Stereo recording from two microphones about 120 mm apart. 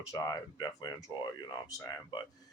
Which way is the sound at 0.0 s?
25° left (ahead or behind).